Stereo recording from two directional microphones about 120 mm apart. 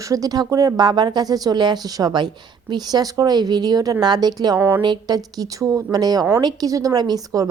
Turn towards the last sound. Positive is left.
turn(degrees=-35)  # may be behind; listen again after turning